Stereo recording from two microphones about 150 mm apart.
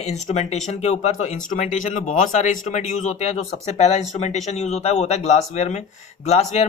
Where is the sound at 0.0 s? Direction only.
45° left (ahead or behind).